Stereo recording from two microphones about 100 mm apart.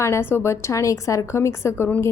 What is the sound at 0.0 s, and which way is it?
Speech, 25° left (ahead or behind).